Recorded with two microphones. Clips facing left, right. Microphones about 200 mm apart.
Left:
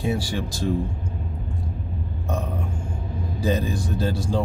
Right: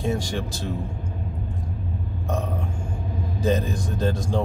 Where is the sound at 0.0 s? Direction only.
10° left (ahead or behind).